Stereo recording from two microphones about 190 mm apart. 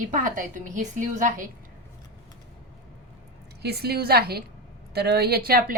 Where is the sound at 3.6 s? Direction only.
55° right (ahead or behind).